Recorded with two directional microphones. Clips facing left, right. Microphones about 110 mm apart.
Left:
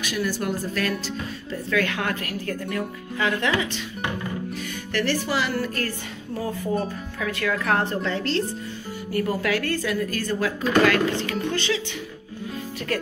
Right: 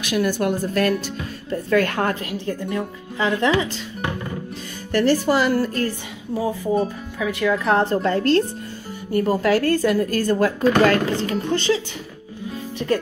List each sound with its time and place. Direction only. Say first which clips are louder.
0.0 s speech: right 6 dB; 60° right (ahead or behind); by 2.1 s 40° right (ahead or behind)
2.1 s a woman's voice: right 3 dB; 25° right (ahead or behind)
4.9 s speech: right 7 dB; 40° right (ahead or behind)
5.8 s music: right 5 dB; 15° right (ahead or behind)
7.6 s speech: right 5 dB; 30° right (ahead or behind); by 8.5 s 50° right (ahead or behind)
9.1 s speech: right 6 dB; 30° right (ahead or behind)